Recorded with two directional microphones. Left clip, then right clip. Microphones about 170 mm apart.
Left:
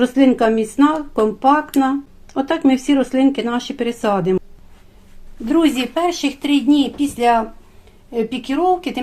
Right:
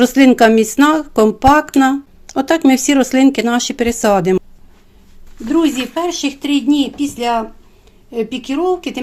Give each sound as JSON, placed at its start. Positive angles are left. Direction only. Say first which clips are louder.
{"t": 0.0, "sound": "speech", "louder": "right 5 dB", "side_deg": -50}
{"t": 5.5, "sound": "speech", "louder": "right 1 dB", "side_deg": -5}